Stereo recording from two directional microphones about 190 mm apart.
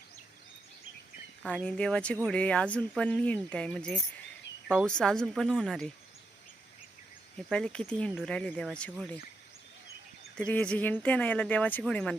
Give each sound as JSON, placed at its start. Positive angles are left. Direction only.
{"t": 1.4, "sound": "speech", "side_deg": 5}
{"t": 7.3, "sound": "speech", "side_deg": 5}
{"t": 10.3, "sound": "speech", "side_deg": 5}